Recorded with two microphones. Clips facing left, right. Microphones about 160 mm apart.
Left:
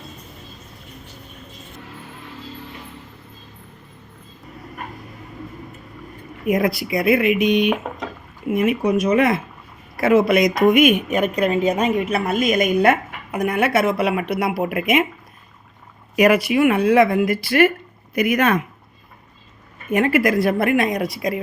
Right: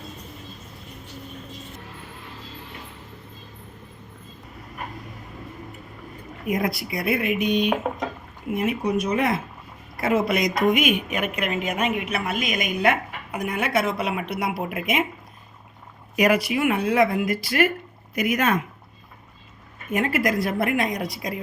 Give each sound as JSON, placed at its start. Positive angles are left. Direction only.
{"t": 6.5, "sound": "speech", "side_deg": 90}
{"t": 10.0, "sound": "speech", "side_deg": 75}
{"t": 16.1, "sound": "speech", "side_deg": 60}
{"t": 19.9, "sound": "a woman's voice", "side_deg": 70}